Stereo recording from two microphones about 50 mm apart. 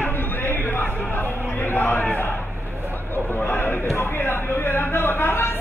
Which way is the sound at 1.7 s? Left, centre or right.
Left.